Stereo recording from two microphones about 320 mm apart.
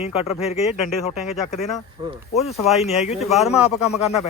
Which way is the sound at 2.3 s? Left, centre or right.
Centre.